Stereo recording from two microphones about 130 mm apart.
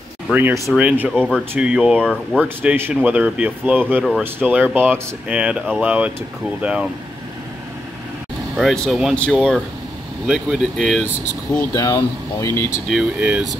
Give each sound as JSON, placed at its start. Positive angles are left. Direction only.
{"t": 0.3, "sound": "speech", "side_deg": -15}
{"t": 1.1, "sound": "speech", "side_deg": 5}
{"t": 1.5, "sound": "speech", "side_deg": -5}
{"t": 8.5, "sound": "speech", "side_deg": 0}
{"t": 10.2, "sound": "speech", "side_deg": -5}
{"t": 11.7, "sound": "speech", "side_deg": 25}
{"t": 12.9, "sound": "speech", "side_deg": -10}